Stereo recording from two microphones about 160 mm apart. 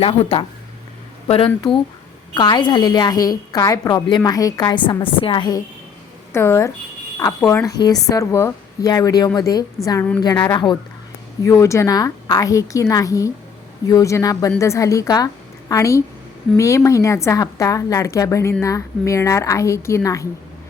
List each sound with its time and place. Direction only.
0.0 s speech: 35° left (ahead or behind)
2.3 s a woman's voice: 30° left (ahead or behind)